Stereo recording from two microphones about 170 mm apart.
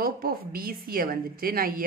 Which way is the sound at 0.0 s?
60° right (ahead or behind).